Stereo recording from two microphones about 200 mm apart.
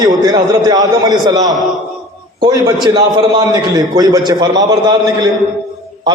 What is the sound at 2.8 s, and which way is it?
A man's voice, 25° right (ahead or behind).